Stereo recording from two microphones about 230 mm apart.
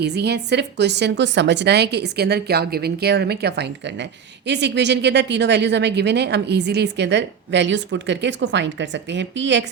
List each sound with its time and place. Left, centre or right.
0.0 s a woman's voice: right